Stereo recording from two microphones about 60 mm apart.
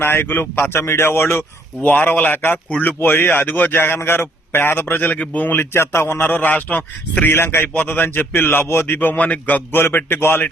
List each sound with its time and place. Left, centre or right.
0.0 s a man's voice: left
0.8 s a man's voice: left
1.8 s a man's voice: left
6.2 s a man's voice: left
9.1 s a man's voice: left
9.8 s a man's voice: left